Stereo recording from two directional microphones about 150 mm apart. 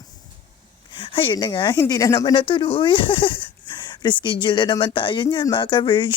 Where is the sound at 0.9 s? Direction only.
35° left (ahead or behind).